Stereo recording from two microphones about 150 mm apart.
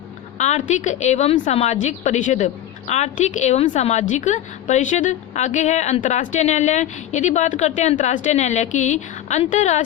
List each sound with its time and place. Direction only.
0.3 s a woman's voice: 50° left (ahead or behind)